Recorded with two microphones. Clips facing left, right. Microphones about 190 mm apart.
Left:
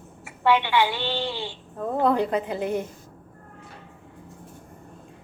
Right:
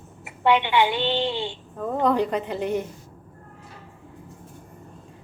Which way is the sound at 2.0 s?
5° left (ahead or behind).